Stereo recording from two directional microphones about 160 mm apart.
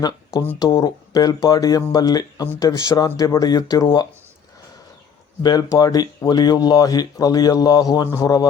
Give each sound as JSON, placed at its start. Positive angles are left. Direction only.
{"t": 0.6, "sound": "speech", "side_deg": 25}
{"t": 5.4, "sound": "speech", "side_deg": 25}